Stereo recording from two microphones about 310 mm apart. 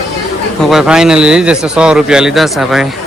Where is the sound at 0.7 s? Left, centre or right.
Centre.